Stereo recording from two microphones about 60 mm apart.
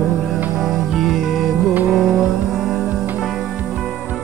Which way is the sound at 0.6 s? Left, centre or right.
Centre.